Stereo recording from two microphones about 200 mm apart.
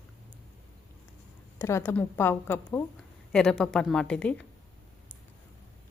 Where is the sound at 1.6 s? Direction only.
10° left (ahead or behind).